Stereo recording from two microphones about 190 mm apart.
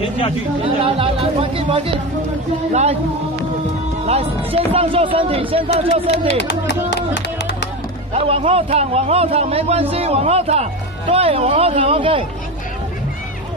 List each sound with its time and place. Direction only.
0.7 s a man's voice: 30° right (ahead or behind)
4.0 s a man's voice: 30° right (ahead or behind)
6.4 s speech: 65° left (ahead or behind)
8.1 s a man's voice: 30° right (ahead or behind)